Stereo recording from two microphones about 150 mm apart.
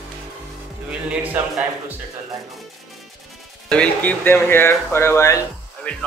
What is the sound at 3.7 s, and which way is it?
Speech, 10° left (ahead or behind).